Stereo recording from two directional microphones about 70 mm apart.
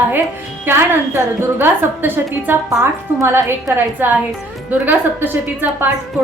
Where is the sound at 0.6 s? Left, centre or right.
Right.